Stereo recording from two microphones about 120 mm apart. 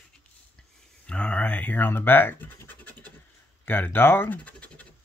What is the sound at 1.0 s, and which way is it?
Scratch, 10° left (ahead or behind).